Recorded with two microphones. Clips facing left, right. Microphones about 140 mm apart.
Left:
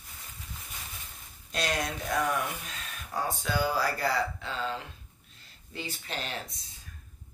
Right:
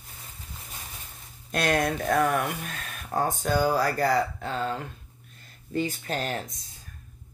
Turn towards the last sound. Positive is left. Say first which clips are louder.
# right 7 dB
turn(degrees=-45)  # may be behind; listen again after turning